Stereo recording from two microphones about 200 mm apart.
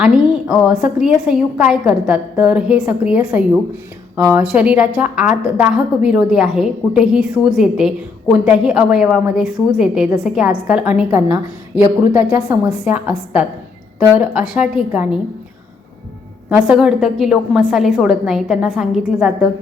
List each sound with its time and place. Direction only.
0.0 s a woman's voice: 5° right (ahead or behind)
11.7 s a woman's voice: 20° left (ahead or behind)
12.1 s a woman's voice: 10° right (ahead or behind)
16.5 s a woman's voice: 5° right (ahead or behind)